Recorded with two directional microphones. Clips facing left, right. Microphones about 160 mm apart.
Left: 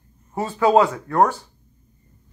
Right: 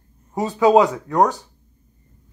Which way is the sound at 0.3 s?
15° right (ahead or behind).